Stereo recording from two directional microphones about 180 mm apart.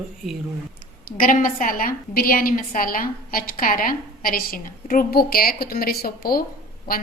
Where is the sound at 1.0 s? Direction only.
50° left (ahead or behind).